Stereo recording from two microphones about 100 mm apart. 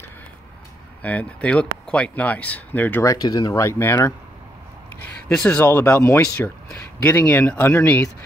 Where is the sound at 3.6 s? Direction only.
25° left (ahead or behind).